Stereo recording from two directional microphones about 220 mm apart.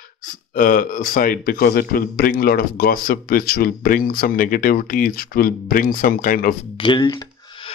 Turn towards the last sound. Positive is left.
turn(degrees=20)  # may be behind; listen again after turning